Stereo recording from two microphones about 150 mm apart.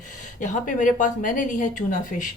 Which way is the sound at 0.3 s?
60° left (ahead or behind).